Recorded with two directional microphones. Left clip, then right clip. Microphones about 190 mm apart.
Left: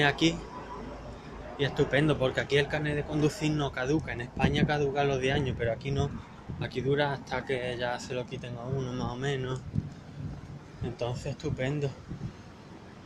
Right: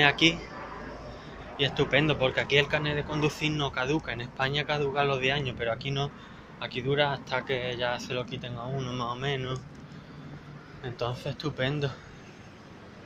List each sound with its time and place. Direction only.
0.0 s speech: 20° left (ahead or behind)
1.6 s speech: 25° left (ahead or behind)
3.2 s speech: 25° left (ahead or behind)
11.0 s speech: 15° left (ahead or behind)